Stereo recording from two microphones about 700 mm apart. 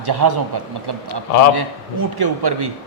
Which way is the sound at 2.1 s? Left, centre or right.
Right.